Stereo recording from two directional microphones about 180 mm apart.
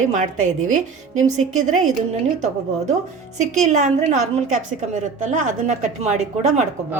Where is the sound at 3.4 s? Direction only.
40° right (ahead or behind).